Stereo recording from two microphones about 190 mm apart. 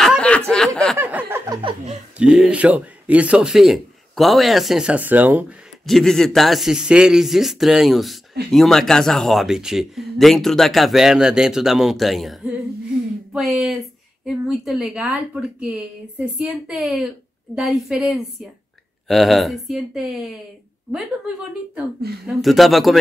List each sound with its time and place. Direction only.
0.0 s snicker: 5° left (ahead or behind)
0.9 s a sound: 10° right (ahead or behind)
1.5 s a sound: 25° right (ahead or behind)
2.1 s speech: 5° right (ahead or behind)
5.9 s speech: centre (ahead or behind)
22.2 s speech: centre (ahead or behind)